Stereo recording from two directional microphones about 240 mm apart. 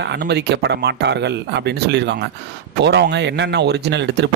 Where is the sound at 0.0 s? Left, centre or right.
Right.